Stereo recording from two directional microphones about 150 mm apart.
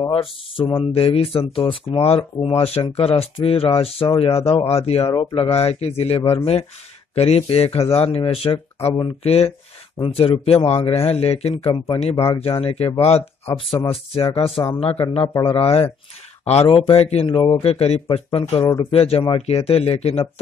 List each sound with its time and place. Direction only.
0.1 s a man's voice: 35° left (ahead or behind)